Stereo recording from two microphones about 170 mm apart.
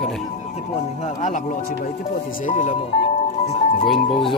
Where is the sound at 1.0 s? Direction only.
40° left (ahead or behind).